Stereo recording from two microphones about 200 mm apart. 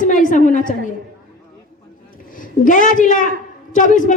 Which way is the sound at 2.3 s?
40° left (ahead or behind).